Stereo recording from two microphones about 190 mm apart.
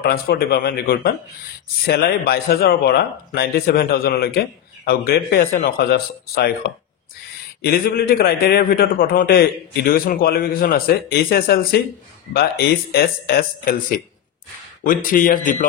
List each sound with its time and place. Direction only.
0.0 s speech: 50° left (ahead or behind)
7.6 s speech: 50° left (ahead or behind)